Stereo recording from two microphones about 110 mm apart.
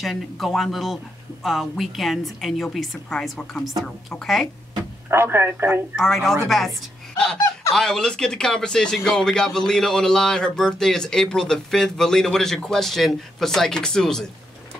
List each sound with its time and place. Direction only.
0.0 s speech: centre (ahead or behind)
5.1 s speech: 20° right (ahead or behind)
5.9 s speech: centre (ahead or behind)
7.7 s speech: 5° left (ahead or behind)